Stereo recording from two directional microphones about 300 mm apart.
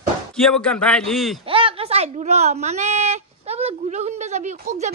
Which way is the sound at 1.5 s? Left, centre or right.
Centre.